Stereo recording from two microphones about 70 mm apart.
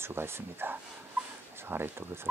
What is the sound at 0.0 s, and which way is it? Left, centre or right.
Speech, right.